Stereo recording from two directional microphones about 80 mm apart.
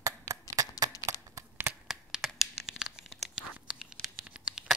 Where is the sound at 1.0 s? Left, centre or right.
Right.